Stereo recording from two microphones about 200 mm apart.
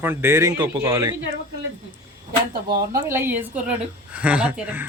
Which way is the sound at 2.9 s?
15° right (ahead or behind).